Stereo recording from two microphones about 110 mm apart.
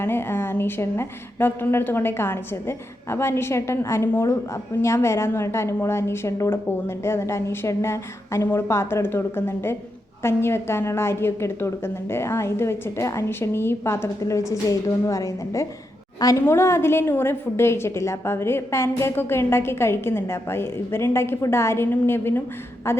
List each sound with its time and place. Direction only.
0.0 s a woman's voice: 20° left (ahead or behind)